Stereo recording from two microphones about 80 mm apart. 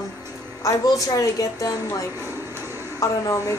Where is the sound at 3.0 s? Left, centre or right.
Left.